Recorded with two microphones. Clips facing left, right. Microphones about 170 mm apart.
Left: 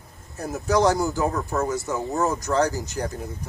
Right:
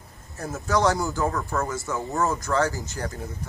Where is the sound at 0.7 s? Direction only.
20° left (ahead or behind).